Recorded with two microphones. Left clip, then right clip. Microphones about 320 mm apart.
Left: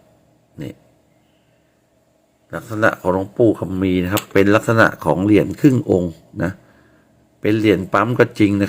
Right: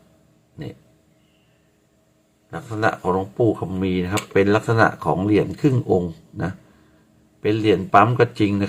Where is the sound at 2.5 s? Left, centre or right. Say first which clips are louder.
Left 4 dB; centre.